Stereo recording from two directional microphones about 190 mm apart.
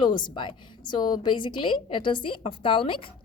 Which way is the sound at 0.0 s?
25° left (ahead or behind).